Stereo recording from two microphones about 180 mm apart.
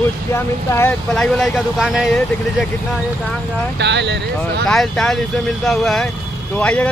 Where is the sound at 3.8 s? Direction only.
75° right (ahead or behind).